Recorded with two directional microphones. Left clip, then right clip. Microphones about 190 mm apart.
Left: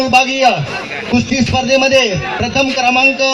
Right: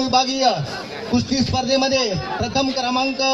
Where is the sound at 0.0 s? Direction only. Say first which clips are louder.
Left 7 dB; 30° left (ahead or behind).